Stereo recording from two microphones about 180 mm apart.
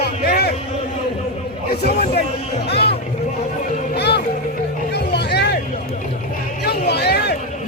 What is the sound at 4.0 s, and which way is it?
Music, 70° left (ahead or behind).